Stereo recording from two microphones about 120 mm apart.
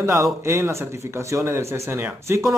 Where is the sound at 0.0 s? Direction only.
25° right (ahead or behind).